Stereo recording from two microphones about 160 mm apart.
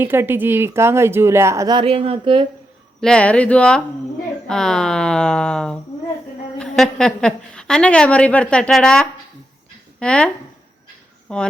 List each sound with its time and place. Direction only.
0.0 s speech: 15° right (ahead or behind); by 2.5 s 35° right (ahead or behind)
3.0 s a woman's voice: 5° left (ahead or behind)
11.3 s a woman's voice: 5° left (ahead or behind)